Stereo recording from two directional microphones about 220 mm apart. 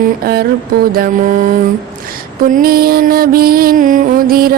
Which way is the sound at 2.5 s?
40° right (ahead or behind).